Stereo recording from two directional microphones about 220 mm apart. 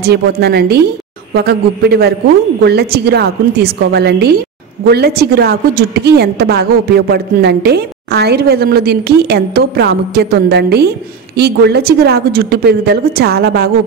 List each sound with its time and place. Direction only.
0.0 s a woman's voice: 45° right (ahead or behind)